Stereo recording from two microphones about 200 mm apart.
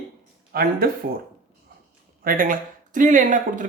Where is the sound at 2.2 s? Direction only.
45° right (ahead or behind).